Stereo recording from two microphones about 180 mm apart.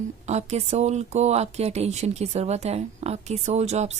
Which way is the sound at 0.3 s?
40° right (ahead or behind).